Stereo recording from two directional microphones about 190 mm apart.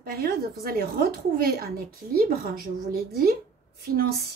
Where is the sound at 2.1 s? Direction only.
50° right (ahead or behind).